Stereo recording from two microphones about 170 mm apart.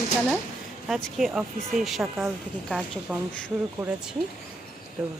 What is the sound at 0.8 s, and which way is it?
Speech, centre (ahead or behind).